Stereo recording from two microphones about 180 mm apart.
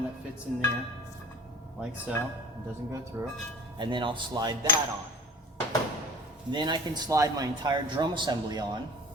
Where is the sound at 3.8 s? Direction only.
25° right (ahead or behind).